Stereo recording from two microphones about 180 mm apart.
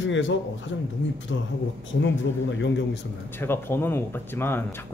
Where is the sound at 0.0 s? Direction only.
90° left.